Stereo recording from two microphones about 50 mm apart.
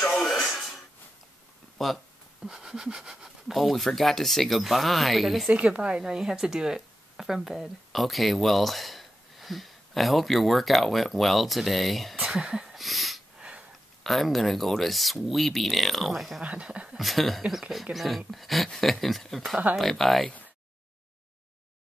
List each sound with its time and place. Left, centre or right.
0.1 s television: centre
1.8 s speech: centre
2.4 s speech: centre
3.5 s speech: centre
5.5 s speech: right; by 12.2 s centre
12.2 s speech: centre
12.7 s a sound: centre
13.4 s a sound: right
14.0 s speech: centre
16.4 s speech: right
17.0 s speech: centre